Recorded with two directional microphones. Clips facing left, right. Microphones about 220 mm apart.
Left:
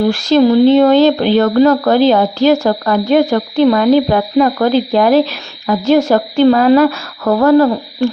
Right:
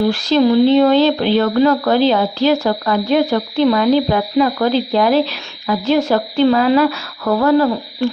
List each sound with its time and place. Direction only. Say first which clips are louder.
0.0 s speech: left 3 dB; 45° left (ahead or behind)